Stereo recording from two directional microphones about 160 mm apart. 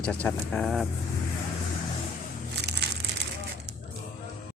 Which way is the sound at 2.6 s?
90° right.